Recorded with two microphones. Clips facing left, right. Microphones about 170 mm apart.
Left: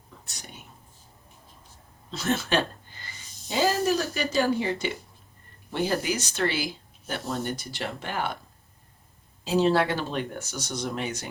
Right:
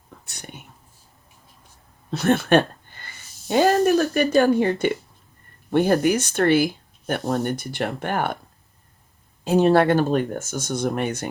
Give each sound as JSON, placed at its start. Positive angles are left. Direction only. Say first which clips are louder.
{"t": 2.0, "sound": "a sound", "louder": "right 8 dB", "side_deg": -60}
{"t": 3.5, "sound": "speech", "louder": "right 7 dB", "side_deg": -60}
{"t": 9.4, "sound": "speech", "louder": "right 6 dB", "side_deg": -55}